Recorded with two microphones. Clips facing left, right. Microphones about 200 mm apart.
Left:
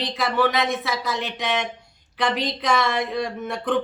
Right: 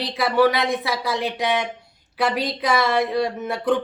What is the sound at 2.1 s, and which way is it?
Speech, 5° right (ahead or behind).